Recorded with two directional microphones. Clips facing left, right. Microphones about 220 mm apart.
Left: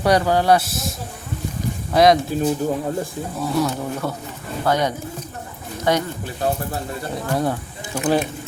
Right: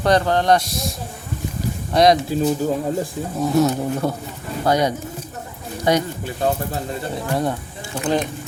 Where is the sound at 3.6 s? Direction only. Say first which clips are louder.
Right 4 dB; 25° right (ahead or behind).